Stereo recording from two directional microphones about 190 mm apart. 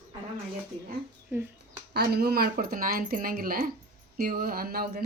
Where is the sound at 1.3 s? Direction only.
15° right (ahead or behind).